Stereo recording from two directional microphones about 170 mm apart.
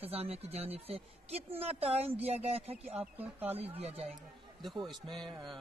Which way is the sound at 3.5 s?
35° right (ahead or behind).